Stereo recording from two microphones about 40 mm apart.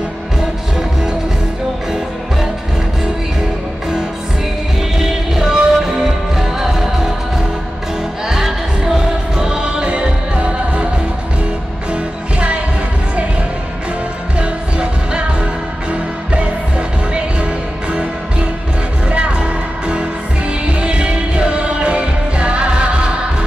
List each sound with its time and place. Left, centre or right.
4.9 s music: centre
8.3 s music: centre; by 10.9 s right
11.9 s music: right
14.4 s music: right
20.8 s music: right